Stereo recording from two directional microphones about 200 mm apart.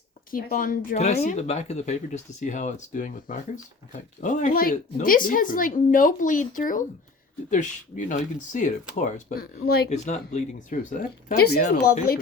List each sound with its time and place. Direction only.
0.3 s a woman's voice: 45° left (ahead or behind)
9.9 s a woman's voice: 35° left (ahead or behind)